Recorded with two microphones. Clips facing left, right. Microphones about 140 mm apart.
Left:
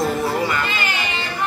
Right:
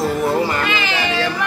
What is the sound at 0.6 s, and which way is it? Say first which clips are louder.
Music: right 4 dB; 90° right.